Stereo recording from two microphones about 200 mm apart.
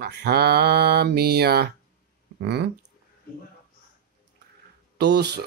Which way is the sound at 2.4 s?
55° right (ahead or behind).